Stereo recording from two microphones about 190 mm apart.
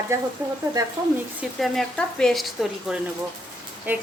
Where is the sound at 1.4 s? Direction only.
Centre (ahead or behind).